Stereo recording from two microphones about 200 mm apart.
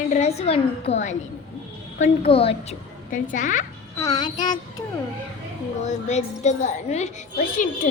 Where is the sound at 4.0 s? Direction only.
15° left (ahead or behind).